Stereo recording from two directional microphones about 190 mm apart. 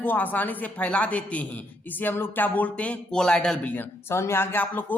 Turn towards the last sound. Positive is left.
turn(degrees=10)  # may be behind; listen again after turning